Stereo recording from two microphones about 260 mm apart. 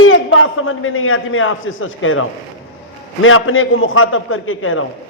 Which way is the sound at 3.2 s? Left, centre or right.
Left.